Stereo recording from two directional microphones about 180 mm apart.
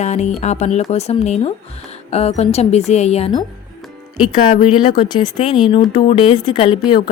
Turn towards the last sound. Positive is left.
turn(degrees=25)  # may be behind; listen again after turning